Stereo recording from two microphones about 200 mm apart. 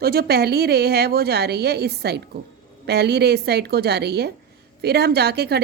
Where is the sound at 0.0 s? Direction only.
50° right (ahead or behind).